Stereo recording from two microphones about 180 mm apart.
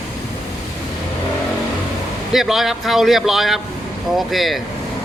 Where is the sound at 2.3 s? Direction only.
Centre (ahead or behind).